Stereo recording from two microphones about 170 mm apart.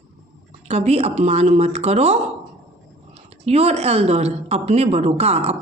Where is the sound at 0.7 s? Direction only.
40° right (ahead or behind).